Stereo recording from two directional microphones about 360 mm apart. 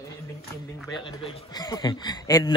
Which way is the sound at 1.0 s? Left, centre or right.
Centre.